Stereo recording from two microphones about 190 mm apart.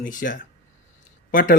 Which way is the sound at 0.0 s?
45° left (ahead or behind).